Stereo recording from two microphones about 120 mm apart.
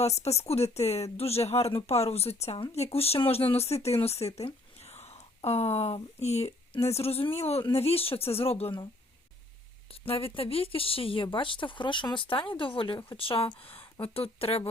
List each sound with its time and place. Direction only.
0.0 s speech: 60° left (ahead or behind)
10.1 s speech: 50° left (ahead or behind)